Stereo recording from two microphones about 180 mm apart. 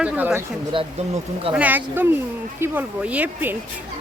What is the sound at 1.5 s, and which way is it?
Speech, 10° right (ahead or behind).